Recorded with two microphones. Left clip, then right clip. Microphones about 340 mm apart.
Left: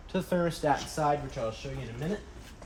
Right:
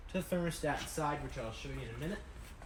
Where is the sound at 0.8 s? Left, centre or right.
Centre.